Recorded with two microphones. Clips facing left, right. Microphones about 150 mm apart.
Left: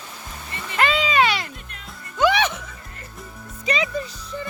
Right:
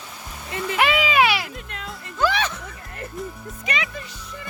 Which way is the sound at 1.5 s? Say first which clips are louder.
Right 7 dB; 90° right.